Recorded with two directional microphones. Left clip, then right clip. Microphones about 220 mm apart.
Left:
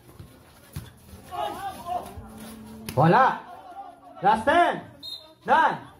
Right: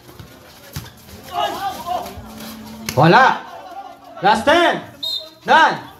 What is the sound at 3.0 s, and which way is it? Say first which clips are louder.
A man's voice: right 8 dB; 15° right (ahead or behind).